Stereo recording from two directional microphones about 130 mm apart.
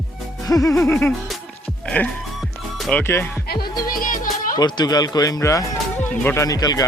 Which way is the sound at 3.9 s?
90° left.